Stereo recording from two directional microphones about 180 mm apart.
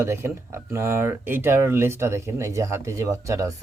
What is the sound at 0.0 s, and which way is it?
Speech, 15° right (ahead or behind).